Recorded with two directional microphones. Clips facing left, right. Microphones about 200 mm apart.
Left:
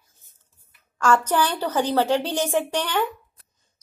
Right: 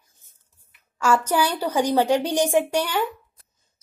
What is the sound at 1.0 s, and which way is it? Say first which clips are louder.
A woman's voice: even; 10° right (ahead or behind).